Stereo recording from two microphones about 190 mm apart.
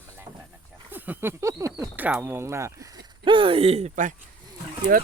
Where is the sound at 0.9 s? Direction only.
10° right (ahead or behind).